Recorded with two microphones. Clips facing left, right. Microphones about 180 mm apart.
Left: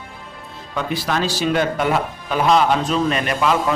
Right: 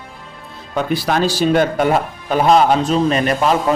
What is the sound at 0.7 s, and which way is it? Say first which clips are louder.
Speech: right 4 dB; 45° right (ahead or behind).